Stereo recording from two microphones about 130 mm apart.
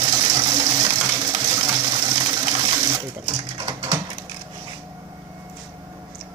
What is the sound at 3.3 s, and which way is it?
Pigeon, 35° right (ahead or behind).